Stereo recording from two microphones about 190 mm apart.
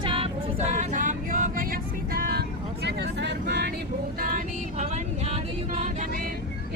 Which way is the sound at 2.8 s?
65° right (ahead or behind).